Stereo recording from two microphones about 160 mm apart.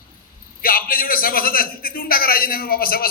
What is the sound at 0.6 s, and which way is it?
A man's voice, 65° left (ahead or behind).